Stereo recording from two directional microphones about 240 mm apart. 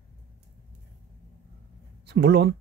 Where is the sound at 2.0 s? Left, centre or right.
Right.